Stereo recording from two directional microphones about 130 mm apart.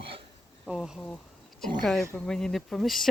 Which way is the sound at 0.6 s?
5° right (ahead or behind).